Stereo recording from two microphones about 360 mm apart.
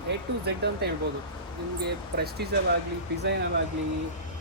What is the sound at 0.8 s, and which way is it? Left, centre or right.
Speech, right.